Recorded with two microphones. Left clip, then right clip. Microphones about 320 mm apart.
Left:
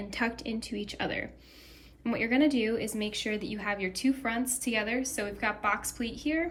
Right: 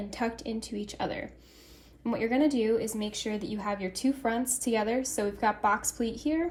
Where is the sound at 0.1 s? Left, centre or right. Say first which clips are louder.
Left 2 dB; centre.